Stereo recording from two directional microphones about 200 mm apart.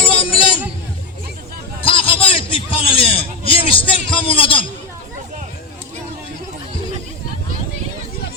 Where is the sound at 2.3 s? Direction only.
25° left (ahead or behind).